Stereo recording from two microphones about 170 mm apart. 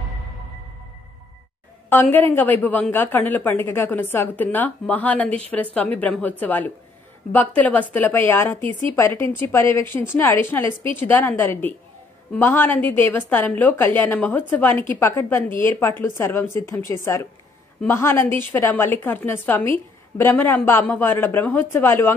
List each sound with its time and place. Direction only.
1.9 s a woman's voice: 10° left (ahead or behind)